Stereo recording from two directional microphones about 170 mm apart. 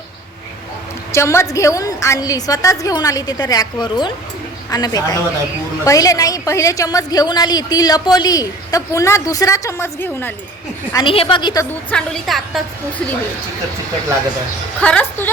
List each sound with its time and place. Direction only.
1.1 s a woman's voice: 15° left (ahead or behind)
10.9 s a woman's voice: 30° left (ahead or behind)
11.9 s a woman's voice: 5° left (ahead or behind)
14.8 s a woman's voice: 5° left (ahead or behind)